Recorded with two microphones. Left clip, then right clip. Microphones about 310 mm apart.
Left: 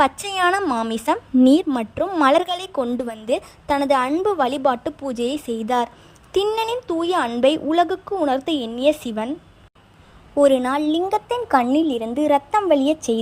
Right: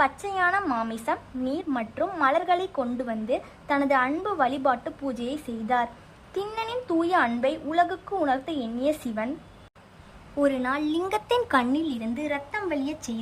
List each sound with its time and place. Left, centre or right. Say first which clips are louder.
0.0 s a woman's voice: left 5 dB; left
10.4 s a woman's voice: left 8 dB; centre
11.1 s speech: left 2 dB; centre
11.9 s a woman's voice: left 11 dB; centre